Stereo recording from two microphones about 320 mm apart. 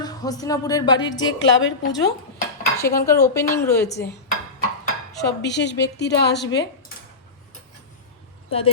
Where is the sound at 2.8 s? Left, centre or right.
Centre.